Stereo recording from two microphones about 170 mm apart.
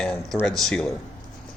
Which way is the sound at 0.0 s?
5° left (ahead or behind).